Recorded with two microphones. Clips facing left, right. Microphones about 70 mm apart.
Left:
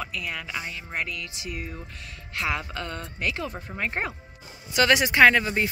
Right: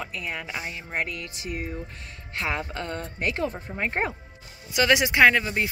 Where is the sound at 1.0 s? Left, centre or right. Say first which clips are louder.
Right 1 dB; right.